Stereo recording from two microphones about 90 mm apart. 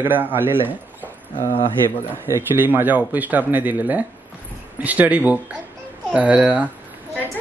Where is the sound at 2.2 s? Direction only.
25° right (ahead or behind).